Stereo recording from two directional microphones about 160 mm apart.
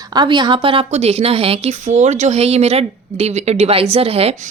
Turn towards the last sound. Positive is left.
turn(degrees=-40)  # may be behind; listen again after turning